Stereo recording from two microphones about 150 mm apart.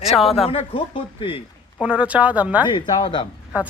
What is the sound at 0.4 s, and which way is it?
Speech, 40° left (ahead or behind).